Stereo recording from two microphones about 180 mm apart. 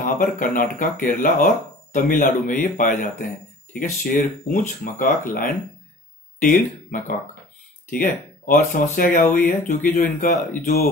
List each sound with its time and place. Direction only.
0.0 s speech: 50° left (ahead or behind)